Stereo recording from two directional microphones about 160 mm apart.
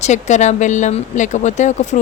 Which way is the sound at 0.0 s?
45° left (ahead or behind).